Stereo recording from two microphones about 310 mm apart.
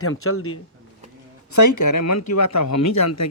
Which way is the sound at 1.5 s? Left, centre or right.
Left.